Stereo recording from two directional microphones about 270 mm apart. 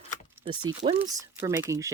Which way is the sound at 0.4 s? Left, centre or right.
Centre.